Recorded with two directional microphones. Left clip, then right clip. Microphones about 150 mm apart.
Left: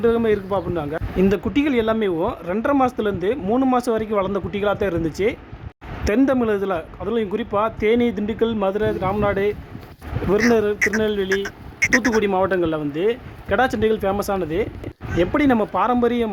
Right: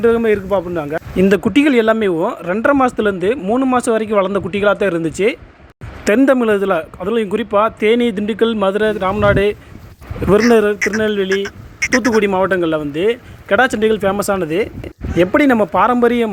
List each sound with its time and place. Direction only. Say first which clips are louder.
0.0 s a man's voice: right 5 dB; 25° right (ahead or behind)
11.4 s a sound: right 1 dB; 10° left (ahead or behind)
12.2 s a man's voice: right 4 dB; 25° right (ahead or behind)